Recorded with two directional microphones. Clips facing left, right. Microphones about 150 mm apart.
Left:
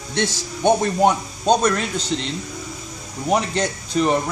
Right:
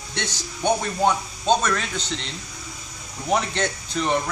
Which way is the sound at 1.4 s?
40° left (ahead or behind).